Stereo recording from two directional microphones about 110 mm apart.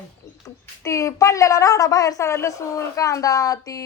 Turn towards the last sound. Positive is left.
turn(degrees=30)  # may be behind; listen again after turning